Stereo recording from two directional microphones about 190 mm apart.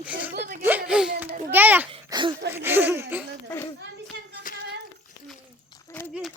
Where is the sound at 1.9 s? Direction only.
25° right (ahead or behind).